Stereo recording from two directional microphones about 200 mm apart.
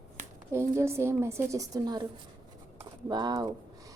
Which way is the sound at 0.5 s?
15° right (ahead or behind).